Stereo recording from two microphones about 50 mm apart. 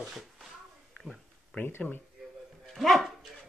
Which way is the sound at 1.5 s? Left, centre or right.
Left.